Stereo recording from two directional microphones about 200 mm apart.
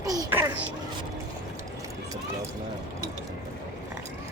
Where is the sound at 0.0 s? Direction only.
20° right (ahead or behind).